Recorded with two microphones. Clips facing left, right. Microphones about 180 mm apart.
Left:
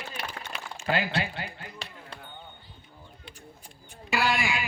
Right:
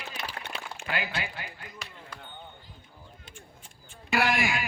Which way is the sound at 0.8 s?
35° left (ahead or behind).